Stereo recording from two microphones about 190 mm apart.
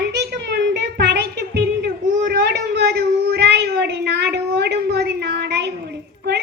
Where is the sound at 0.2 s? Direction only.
60° right (ahead or behind).